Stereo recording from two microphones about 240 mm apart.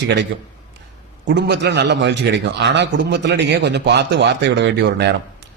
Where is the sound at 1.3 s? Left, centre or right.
Right.